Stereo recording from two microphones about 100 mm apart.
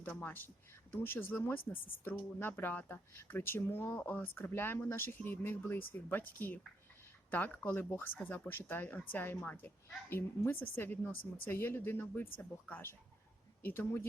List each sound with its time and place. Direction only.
0.0 s speech: 20° left (ahead or behind)